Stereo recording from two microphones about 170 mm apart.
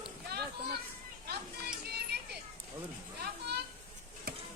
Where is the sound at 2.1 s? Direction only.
75° right (ahead or behind).